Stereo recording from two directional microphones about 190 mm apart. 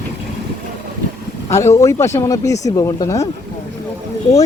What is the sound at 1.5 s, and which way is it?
Speech, 15° left (ahead or behind).